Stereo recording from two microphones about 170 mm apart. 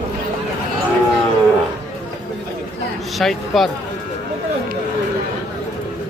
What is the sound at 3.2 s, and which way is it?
Speech, centre (ahead or behind).